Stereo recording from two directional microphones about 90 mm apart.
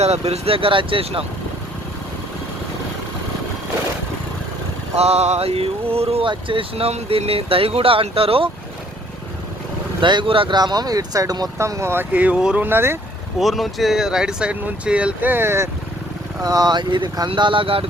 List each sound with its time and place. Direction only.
0.4 s speech: 85° right
5.4 s speech: 90° right
10.0 s speech: 60° right (ahead or behind); by 10.6 s 75° right (ahead or behind)
10.6 s speech: 50° right (ahead or behind)
11.5 s speech: 30° right (ahead or behind); by 12.6 s 10° right (ahead or behind)
12.6 s speech: 25° right (ahead or behind)
13.4 s speech: centre (ahead or behind); by 15.7 s 30° right (ahead or behind)
16.4 s speech: 45° right (ahead or behind); by 17.8 s 85° right